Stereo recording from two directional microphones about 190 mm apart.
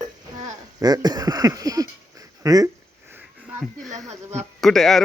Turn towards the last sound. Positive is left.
turn(degrees=0)  # may be behind; listen again after turning